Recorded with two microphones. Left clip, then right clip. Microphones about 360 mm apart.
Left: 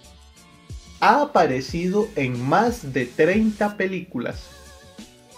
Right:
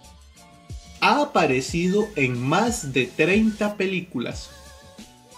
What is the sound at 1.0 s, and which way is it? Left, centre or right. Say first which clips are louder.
Speech: left 3 dB; centre.